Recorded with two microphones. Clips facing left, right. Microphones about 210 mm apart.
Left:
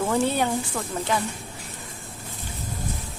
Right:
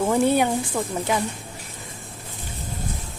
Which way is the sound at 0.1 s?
10° right (ahead or behind).